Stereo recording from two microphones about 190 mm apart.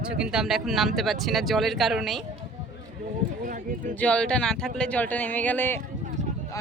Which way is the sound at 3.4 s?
45° right (ahead or behind).